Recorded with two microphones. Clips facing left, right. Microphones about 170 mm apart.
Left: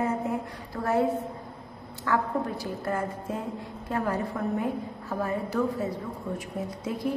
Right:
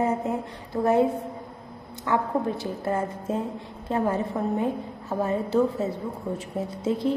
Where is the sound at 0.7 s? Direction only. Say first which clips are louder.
Right 7 dB; 20° right (ahead or behind).